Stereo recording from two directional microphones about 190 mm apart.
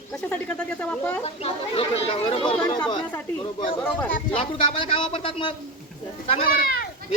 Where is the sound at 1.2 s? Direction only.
30° left (ahead or behind).